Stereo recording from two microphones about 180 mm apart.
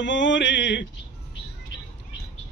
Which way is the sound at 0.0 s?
85° left.